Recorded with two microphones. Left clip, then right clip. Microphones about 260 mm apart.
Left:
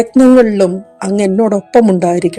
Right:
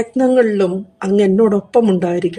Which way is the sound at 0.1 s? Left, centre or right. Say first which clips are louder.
Left 4 dB; left.